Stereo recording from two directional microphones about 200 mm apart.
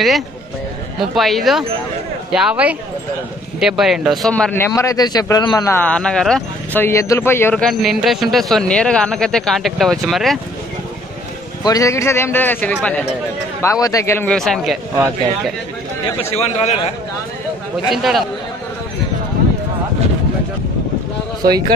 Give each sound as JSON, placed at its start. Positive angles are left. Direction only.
{"t": 1.1, "sound": "a man's voice", "side_deg": 0}
{"t": 11.6, "sound": "a man's voice", "side_deg": 15}
{"t": 16.2, "sound": "a man's voice", "side_deg": 30}
{"t": 17.8, "sound": "a man's voice", "side_deg": 0}